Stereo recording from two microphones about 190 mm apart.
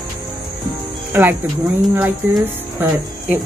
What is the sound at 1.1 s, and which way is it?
Speech, 10° right (ahead or behind).